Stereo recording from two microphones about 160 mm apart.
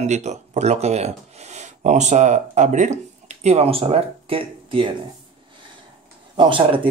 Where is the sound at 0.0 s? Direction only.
45° right (ahead or behind).